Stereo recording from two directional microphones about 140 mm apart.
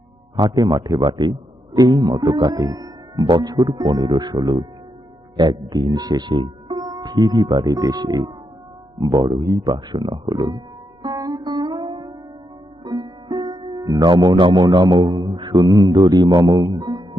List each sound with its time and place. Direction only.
0.3 s a man's voice: 30° right (ahead or behind)
11.0 s music: 30° right (ahead or behind)